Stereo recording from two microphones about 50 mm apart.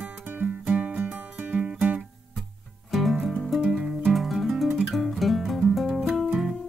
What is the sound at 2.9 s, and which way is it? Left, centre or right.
Music, centre.